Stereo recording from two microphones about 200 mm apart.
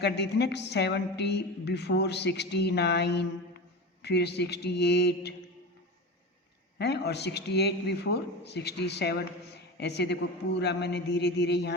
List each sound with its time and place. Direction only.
0.0 s a woman's voice: 55° left (ahead or behind)
6.7 s a woman's voice: 55° left (ahead or behind)